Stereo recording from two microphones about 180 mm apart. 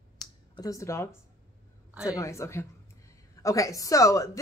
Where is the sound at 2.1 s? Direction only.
15° left (ahead or behind).